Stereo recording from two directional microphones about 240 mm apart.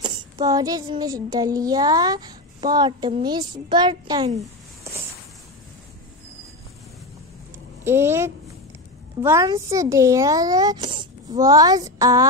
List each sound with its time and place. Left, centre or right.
0.0 s a child's voice: centre
7.8 s a child's voice: centre